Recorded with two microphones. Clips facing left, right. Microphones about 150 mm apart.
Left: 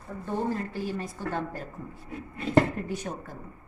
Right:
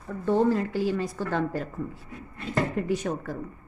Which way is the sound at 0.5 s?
90° right.